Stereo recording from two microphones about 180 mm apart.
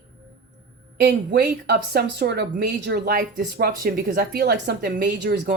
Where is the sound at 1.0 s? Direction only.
70° right (ahead or behind).